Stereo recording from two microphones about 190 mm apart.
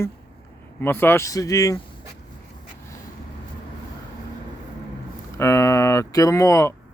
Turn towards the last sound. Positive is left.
turn(degrees=15)  # may be behind; listen again after turning